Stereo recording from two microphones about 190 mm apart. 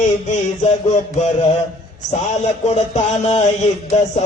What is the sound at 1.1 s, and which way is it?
Music, 35° left (ahead or behind).